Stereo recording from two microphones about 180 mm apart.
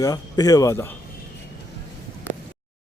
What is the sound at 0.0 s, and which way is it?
Speech, 20° left (ahead or behind).